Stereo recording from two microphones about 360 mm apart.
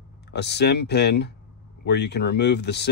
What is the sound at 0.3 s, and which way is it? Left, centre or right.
Speech, left.